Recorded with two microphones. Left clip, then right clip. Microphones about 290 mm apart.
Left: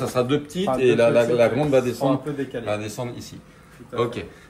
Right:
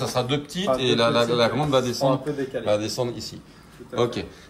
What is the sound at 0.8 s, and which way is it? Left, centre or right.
Speech, right.